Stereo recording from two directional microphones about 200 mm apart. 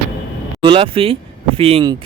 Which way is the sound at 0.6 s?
25° right (ahead or behind).